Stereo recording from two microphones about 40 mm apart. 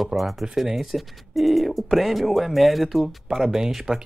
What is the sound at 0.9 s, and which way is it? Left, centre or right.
Speech, centre.